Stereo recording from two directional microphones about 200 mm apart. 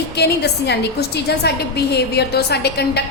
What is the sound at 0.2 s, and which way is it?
A woman's voice, 55° left (ahead or behind).